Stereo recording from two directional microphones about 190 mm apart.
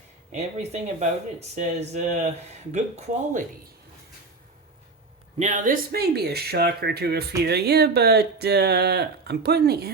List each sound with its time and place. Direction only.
0.3 s speech: 35° right (ahead or behind)
5.4 s speech: 40° right (ahead or behind); by 9.9 s 55° right (ahead or behind)